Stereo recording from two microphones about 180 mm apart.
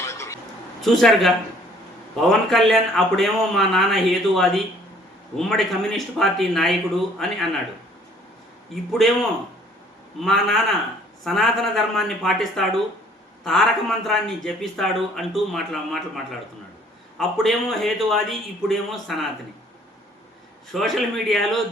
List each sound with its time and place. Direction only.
0.0 s a sound: 15° left (ahead or behind)
0.8 s a man's voice: centre (ahead or behind)
8.7 s a man's voice: centre (ahead or behind)
10.2 s a man's voice: centre (ahead or behind)
17.2 s a man's voice: centre (ahead or behind)
20.7 s a man's voice: centre (ahead or behind)